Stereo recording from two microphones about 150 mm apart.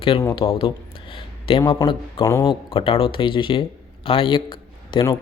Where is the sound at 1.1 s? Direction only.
35° left (ahead or behind).